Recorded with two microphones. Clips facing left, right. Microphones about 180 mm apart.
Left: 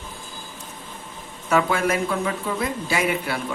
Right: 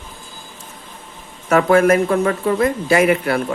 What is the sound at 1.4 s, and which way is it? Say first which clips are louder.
Speech: right 8 dB; 50° right (ahead or behind).